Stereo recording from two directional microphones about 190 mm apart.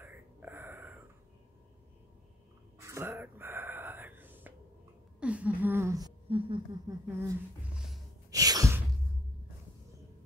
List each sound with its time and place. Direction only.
0.0 s gasp: 10° right (ahead or behind)
2.8 s whispering: 15° right (ahead or behind)
5.2 s speech: 5° right (ahead or behind); by 6.6 s 30° right (ahead or behind)
6.9 s speech: 15° right (ahead or behind)
7.7 s music: centre (ahead or behind)
8.3 s sigh: 20° right (ahead or behind)